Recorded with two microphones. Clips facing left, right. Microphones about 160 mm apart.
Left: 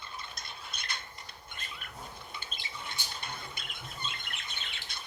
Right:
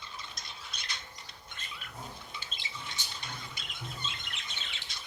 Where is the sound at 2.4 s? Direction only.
55° left (ahead or behind).